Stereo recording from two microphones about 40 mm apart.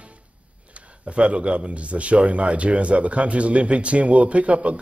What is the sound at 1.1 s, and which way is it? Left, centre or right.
A man's voice, right.